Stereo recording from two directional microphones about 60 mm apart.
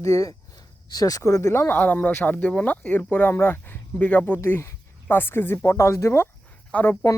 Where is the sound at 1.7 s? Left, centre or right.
Left.